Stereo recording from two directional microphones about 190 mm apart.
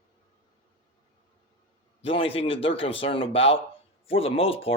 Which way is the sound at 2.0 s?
30° left (ahead or behind).